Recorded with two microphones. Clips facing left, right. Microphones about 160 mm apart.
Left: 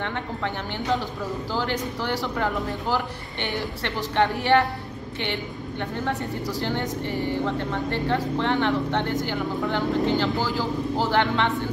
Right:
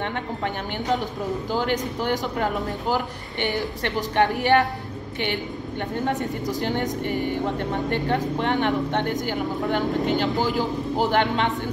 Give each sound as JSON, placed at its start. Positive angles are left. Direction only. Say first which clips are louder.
{"t": 1.5, "sound": "a woman's voice", "louder": "right 3 dB", "side_deg": -15}
{"t": 6.0, "sound": "a woman's voice", "louder": "right 3 dB", "side_deg": -20}